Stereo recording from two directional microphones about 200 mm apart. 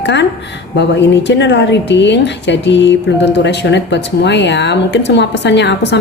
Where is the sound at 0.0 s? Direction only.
60° left (ahead or behind).